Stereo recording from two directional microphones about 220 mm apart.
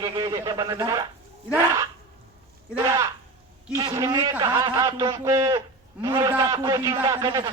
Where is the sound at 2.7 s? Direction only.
15° right (ahead or behind).